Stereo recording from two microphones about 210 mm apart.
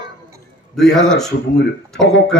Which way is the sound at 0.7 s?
Centre (ahead or behind).